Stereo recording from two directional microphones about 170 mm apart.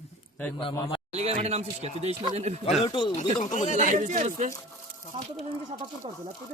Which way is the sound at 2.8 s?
30° left (ahead or behind).